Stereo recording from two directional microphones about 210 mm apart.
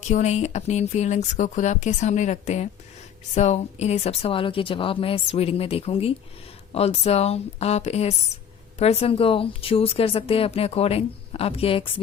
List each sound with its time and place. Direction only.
0.0 s speech: 35° left (ahead or behind)